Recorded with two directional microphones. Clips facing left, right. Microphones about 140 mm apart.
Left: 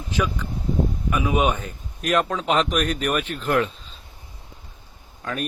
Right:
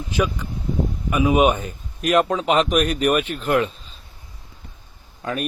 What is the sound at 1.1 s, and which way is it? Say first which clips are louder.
Speech: right 5 dB; 15° right (ahead or behind).